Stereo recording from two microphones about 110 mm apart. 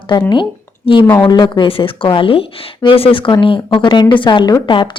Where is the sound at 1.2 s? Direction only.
45° left (ahead or behind).